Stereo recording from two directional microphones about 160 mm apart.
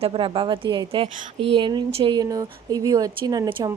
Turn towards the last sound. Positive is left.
turn(degrees=-30)  # may be behind; listen again after turning